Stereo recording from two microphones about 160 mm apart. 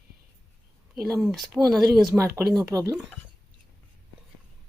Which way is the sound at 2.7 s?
20° right (ahead or behind).